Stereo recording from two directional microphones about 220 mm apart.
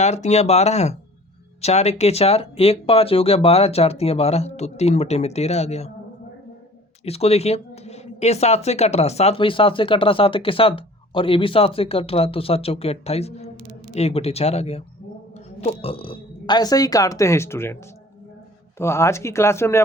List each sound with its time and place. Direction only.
0.0 s speech: 30° left (ahead or behind)
7.0 s speech: 30° left (ahead or behind); by 17.7 s 10° left (ahead or behind)
18.8 s speech: 10° left (ahead or behind)